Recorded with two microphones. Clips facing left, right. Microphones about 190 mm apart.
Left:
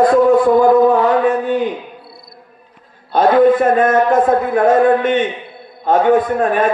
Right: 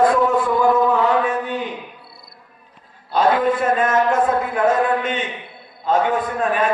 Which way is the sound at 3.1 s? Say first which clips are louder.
Left 7 dB; 50° left (ahead or behind).